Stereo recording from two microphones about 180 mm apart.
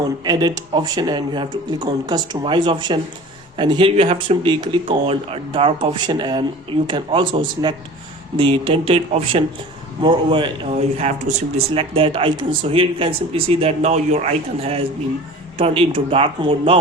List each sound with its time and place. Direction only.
0.3 s speech: 20° right (ahead or behind)